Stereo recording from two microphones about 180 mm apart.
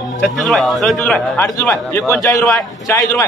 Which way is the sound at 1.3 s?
20° left (ahead or behind).